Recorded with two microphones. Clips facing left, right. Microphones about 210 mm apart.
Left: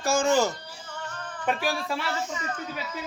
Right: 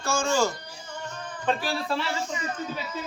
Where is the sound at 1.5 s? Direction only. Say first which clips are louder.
Even; 10° left (ahead or behind).